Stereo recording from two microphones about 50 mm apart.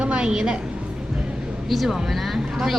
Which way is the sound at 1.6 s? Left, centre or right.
Centre.